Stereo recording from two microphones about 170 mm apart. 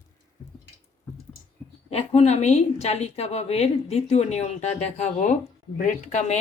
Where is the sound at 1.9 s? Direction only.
40° left (ahead or behind).